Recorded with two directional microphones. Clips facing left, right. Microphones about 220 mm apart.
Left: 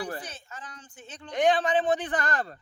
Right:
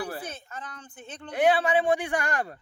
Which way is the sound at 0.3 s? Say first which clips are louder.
Right 4 dB; 55° right (ahead or behind).